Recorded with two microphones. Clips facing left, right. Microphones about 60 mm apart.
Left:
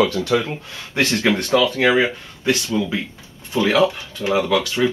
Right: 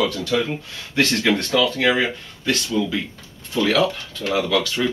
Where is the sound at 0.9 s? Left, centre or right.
Centre.